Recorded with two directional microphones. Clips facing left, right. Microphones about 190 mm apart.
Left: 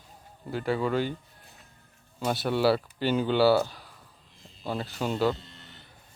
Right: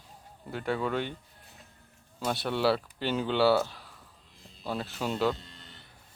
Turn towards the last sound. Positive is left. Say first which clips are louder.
# left 2 dB
turn(degrees=0)  # may be behind; listen again after turning